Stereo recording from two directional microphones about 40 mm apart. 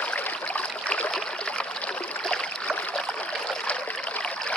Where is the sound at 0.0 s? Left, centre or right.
Left.